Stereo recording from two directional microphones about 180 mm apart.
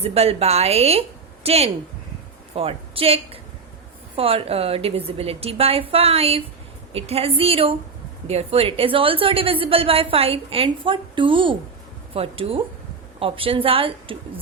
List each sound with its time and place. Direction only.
0.0 s a woman's voice: 35° right (ahead or behind)